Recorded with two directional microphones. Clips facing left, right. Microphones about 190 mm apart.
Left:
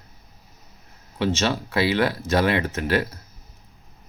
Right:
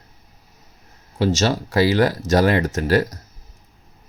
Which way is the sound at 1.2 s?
40° right (ahead or behind).